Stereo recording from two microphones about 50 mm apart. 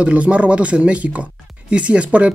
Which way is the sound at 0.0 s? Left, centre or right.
Right.